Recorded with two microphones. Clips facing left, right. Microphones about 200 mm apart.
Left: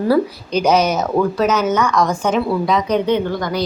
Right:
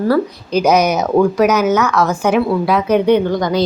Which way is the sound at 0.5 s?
10° right (ahead or behind).